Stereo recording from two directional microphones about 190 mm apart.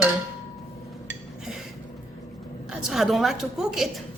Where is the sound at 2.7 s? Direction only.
Centre (ahead or behind).